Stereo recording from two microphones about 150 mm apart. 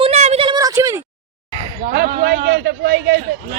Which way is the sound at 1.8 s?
85° right.